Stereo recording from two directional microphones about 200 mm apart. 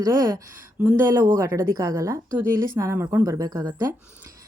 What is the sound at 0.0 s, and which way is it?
Speech, 15° right (ahead or behind).